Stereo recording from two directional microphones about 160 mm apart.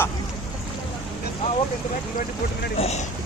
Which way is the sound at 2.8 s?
40° left (ahead or behind).